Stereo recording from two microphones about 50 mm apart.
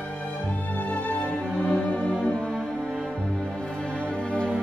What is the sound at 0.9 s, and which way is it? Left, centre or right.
Music, left.